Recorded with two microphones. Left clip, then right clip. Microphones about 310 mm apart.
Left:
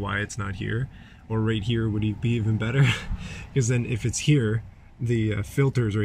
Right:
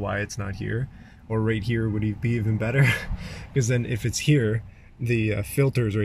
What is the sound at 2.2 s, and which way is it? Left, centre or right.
Speech, centre.